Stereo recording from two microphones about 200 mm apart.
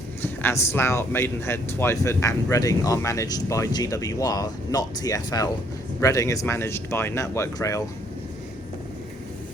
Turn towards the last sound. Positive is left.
turn(degrees=15)  # may be behind; listen again after turning